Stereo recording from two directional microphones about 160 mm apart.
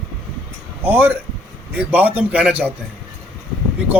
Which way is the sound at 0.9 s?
10° right (ahead or behind).